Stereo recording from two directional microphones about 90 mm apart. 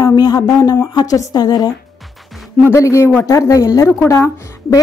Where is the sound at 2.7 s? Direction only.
30° left (ahead or behind).